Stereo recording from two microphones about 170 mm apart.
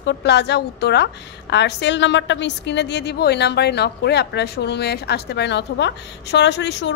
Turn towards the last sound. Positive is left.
turn(degrees=90)